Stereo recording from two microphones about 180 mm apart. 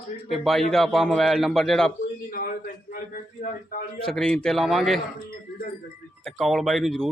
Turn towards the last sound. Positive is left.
turn(degrees=0)  # may be behind; listen again after turning